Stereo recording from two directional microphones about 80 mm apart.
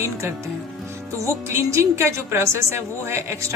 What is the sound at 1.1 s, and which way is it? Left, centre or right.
A woman's voice, right.